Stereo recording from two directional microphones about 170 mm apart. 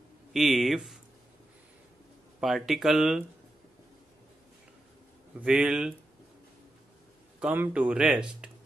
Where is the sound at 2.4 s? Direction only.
Centre (ahead or behind).